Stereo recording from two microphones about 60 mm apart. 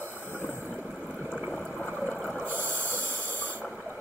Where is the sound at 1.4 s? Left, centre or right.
Centre.